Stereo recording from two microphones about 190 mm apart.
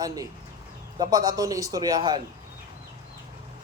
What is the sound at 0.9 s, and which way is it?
A man's voice, 20° right (ahead or behind).